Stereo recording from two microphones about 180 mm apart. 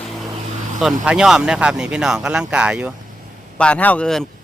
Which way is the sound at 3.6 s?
5° left (ahead or behind).